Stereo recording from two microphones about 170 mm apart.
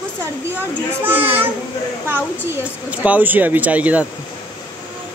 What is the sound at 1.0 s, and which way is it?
Speech, 10° right (ahead or behind).